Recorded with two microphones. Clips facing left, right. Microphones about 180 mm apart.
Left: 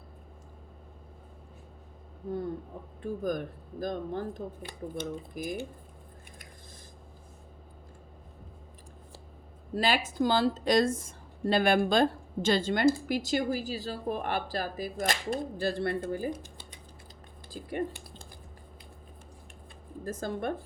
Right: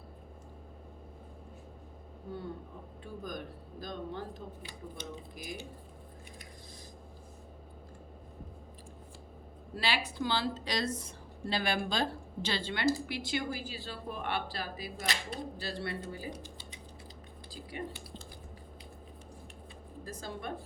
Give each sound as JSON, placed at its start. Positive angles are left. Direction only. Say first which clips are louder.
{"t": 3.0, "sound": "a woman's voice", "louder": "left 10 dB", "side_deg": 50}
{"t": 9.7, "sound": "a woman's voice", "louder": "left 6 dB", "side_deg": 45}
{"t": 20.1, "sound": "a woman's voice", "louder": "left 8 dB", "side_deg": 50}